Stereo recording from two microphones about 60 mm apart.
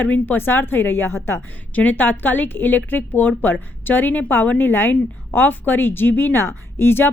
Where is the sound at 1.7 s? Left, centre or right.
Left.